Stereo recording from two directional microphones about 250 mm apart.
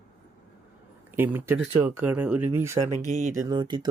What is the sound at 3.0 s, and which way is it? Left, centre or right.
Speech, right.